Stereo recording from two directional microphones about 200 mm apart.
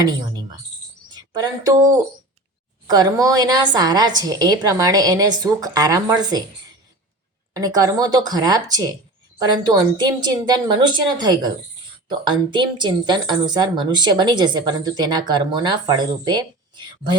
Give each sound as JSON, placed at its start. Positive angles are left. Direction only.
{"t": 1.1, "sound": "a woman's voice", "side_deg": -20}
{"t": 7.5, "sound": "a woman's voice", "side_deg": -20}